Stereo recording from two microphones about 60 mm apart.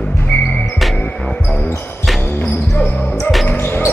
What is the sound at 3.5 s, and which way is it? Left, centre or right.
Music, left.